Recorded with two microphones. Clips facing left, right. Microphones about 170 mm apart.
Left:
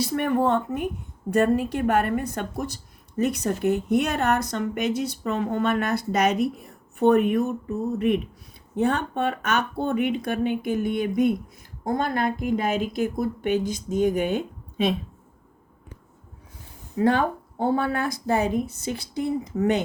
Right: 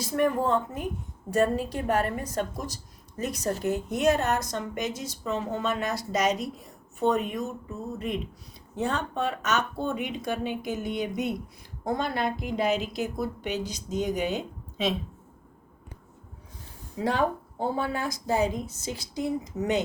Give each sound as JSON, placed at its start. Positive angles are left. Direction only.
{"t": 0.0, "sound": "a woman's voice", "side_deg": 65}
{"t": 17.0, "sound": "a woman's voice", "side_deg": 60}